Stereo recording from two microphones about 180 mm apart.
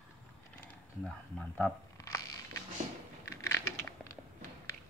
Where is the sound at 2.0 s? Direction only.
20° left (ahead or behind).